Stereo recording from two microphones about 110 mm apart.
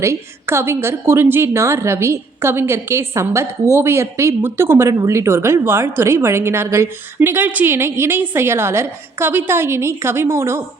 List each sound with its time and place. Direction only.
0.0 s a woman's voice: 25° right (ahead or behind)